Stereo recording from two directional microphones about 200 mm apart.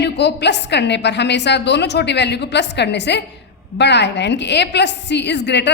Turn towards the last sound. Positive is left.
turn(degrees=60)  # may be behind; listen again after turning